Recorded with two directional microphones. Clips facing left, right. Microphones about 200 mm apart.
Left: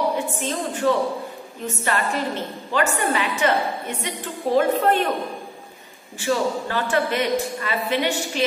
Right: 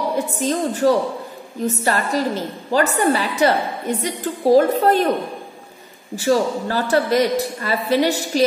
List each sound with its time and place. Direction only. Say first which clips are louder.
0.4 s a woman's voice: right 6 dB; 40° right (ahead or behind)
6.1 s a woman's voice: right 4 dB; 40° right (ahead or behind)